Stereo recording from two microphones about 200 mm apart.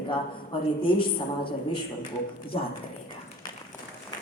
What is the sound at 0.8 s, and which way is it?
A woman's voice, 25° left (ahead or behind).